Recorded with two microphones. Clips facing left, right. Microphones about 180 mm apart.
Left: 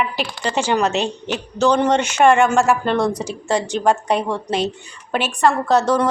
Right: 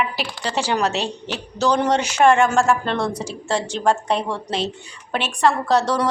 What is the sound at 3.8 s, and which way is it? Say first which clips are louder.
A woman's voice: even; 5° left (ahead or behind).